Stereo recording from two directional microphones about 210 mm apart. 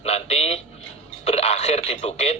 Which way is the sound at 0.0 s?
30° left (ahead or behind).